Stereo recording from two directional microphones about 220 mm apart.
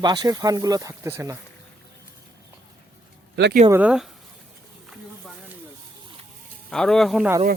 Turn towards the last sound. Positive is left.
turn(degrees=0)  # may be behind; listen again after turning